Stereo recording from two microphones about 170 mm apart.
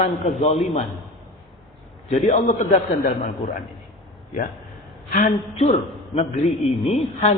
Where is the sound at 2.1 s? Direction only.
45° left (ahead or behind).